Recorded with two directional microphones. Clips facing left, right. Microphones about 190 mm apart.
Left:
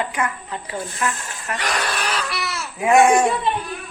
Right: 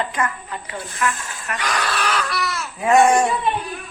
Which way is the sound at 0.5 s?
30° left (ahead or behind).